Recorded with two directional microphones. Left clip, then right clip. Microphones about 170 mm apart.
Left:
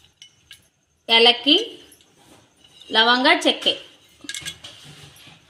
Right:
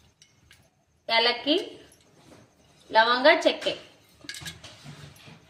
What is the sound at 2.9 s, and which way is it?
Speech, 60° left (ahead or behind).